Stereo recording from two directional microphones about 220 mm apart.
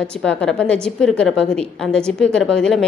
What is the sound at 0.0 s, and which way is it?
A woman's voice, 5° left (ahead or behind).